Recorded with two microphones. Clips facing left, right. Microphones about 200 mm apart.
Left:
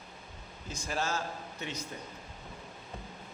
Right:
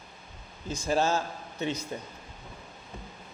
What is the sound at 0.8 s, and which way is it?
A man's voice, 25° right (ahead or behind).